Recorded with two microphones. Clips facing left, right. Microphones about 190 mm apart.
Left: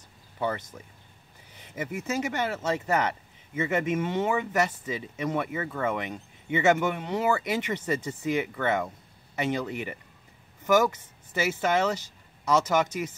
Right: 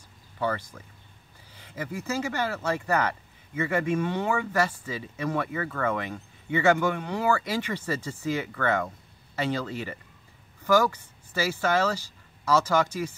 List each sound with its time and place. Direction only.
0.4 s speech: 20° left (ahead or behind)